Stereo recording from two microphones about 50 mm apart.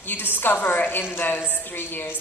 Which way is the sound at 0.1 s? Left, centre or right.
Left.